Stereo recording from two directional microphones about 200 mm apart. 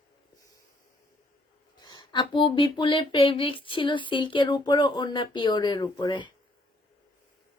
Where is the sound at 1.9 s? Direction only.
20° left (ahead or behind).